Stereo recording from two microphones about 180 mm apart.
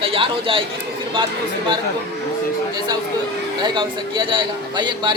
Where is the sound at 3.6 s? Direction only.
25° right (ahead or behind).